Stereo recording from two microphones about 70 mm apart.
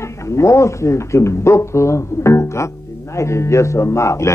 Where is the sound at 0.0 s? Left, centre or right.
Left.